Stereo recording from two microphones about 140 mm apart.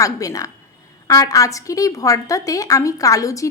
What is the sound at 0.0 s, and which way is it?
A woman's voice, 25° left (ahead or behind).